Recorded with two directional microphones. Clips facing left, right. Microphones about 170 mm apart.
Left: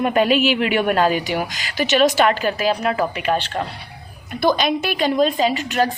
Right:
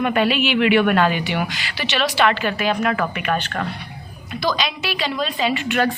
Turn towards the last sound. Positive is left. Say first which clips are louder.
# left 2 dB
turn(degrees=40)  # may be behind; listen again after turning